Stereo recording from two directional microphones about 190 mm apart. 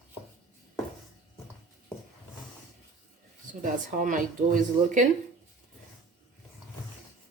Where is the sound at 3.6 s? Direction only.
45° right (ahead or behind).